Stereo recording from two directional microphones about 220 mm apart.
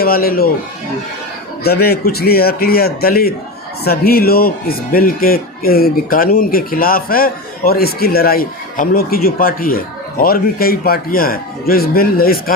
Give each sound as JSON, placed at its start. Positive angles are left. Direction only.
{"t": 0.0, "sound": "a man's voice", "side_deg": 40}
{"t": 1.6, "sound": "a man's voice", "side_deg": 45}